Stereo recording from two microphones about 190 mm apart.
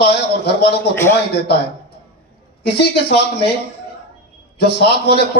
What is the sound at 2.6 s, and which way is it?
Speech, 60° left (ahead or behind).